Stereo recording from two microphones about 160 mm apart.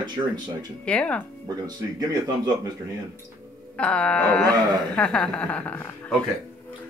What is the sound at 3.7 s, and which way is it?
Wail, 5° left (ahead or behind).